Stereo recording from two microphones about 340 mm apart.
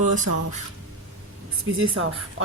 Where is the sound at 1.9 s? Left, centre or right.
Right.